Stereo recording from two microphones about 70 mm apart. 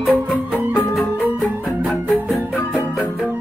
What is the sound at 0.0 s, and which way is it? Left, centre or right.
Music, centre.